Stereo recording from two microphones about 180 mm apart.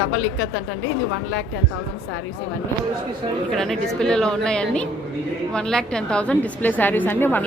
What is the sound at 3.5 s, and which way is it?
A woman's voice, centre (ahead or behind).